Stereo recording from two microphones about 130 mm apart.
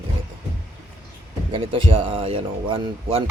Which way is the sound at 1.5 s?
40° right (ahead or behind).